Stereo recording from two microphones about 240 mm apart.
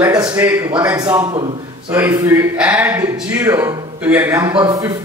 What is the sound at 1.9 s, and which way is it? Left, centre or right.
Speech, centre.